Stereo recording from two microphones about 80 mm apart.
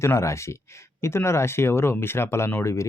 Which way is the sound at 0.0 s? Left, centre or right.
Left.